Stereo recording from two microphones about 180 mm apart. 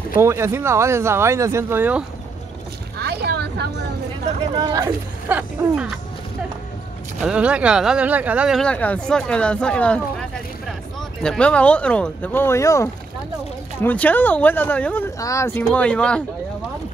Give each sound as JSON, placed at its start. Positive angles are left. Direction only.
{"t": 0.2, "sound": "speech", "side_deg": -15}
{"t": 3.0, "sound": "vehicle", "side_deg": -65}
{"t": 4.6, "sound": "speech", "side_deg": -20}
{"t": 7.2, "sound": "speech", "side_deg": -5}
{"t": 11.0, "sound": "speech", "side_deg": 5}